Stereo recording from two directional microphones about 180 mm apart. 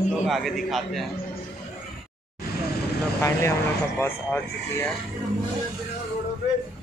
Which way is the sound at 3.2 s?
15° left (ahead or behind).